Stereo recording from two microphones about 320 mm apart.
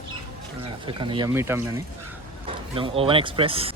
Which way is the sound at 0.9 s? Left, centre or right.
Centre.